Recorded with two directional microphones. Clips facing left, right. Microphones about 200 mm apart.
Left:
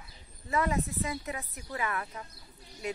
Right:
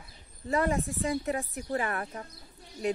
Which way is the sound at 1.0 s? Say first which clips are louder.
Right 6 dB; 50° right (ahead or behind).